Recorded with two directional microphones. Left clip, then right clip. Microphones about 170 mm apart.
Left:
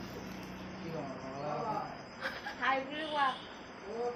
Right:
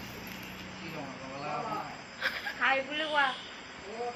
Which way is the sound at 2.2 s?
Centre (ahead or behind).